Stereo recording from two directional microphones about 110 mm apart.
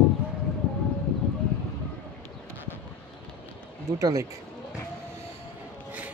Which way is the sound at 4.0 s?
35° right (ahead or behind).